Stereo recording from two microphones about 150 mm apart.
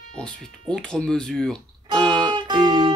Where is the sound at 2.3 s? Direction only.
30° right (ahead or behind).